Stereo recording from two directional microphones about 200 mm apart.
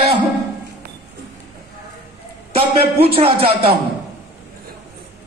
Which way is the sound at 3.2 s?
30° right (ahead or behind).